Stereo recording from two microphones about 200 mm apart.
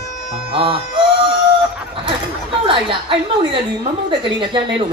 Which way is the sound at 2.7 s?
25° right (ahead or behind).